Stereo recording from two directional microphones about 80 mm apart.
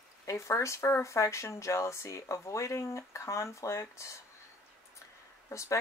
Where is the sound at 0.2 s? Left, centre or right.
Left.